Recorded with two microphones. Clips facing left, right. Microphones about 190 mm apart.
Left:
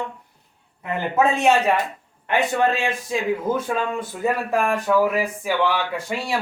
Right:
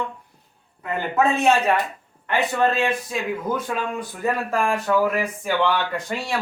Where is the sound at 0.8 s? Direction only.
15° left (ahead or behind).